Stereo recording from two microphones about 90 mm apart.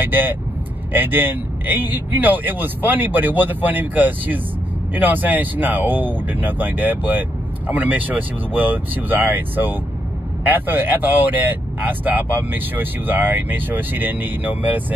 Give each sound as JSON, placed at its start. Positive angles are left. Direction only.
{"t": 0.0, "sound": "speech", "side_deg": -20}